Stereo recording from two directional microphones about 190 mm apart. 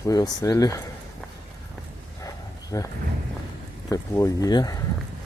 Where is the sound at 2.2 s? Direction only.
15° left (ahead or behind).